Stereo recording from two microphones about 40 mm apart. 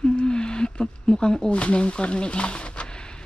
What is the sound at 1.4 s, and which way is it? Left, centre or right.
Speech, left.